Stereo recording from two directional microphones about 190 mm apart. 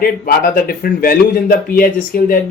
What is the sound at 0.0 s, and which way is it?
Speech, 50° left (ahead or behind).